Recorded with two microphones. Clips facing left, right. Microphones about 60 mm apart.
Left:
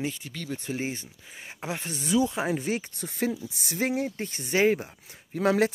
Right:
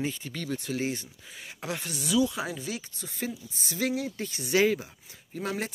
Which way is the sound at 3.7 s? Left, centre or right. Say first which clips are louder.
Left 2 dB; left.